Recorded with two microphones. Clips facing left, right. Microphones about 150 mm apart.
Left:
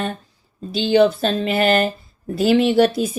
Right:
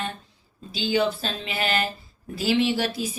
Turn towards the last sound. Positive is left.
turn(degrees=55)  # may be behind; listen again after turning